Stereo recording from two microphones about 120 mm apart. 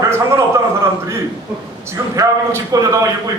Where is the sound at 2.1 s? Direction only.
25° right (ahead or behind).